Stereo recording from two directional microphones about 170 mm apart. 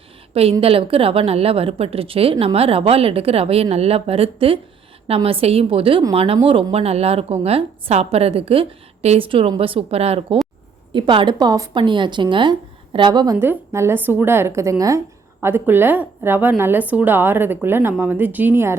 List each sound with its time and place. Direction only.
0.6 s a woman's voice: 35° right (ahead or behind)
13.3 s a woman's voice: 10° right (ahead or behind)